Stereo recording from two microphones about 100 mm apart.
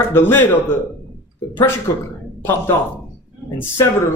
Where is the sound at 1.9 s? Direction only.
30° left (ahead or behind).